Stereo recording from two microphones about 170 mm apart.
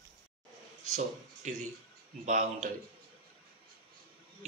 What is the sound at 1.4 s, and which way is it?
Speech, 45° right (ahead or behind).